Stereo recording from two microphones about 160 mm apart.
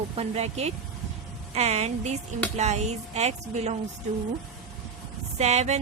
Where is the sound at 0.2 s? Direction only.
40° right (ahead or behind).